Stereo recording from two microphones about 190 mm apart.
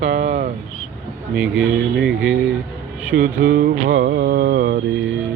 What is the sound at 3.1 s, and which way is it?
Mantra, 75° right (ahead or behind).